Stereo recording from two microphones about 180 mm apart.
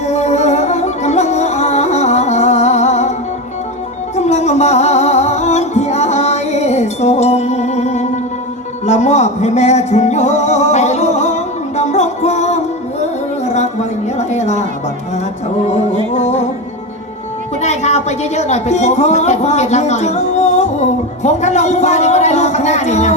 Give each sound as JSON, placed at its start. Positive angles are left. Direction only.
{"t": 0.0, "sound": "music", "side_deg": 40}
{"t": 14.2, "sound": "a sound", "side_deg": 40}
{"t": 16.1, "sound": "music", "side_deg": 40}
{"t": 17.6, "sound": "a man's voice", "side_deg": 40}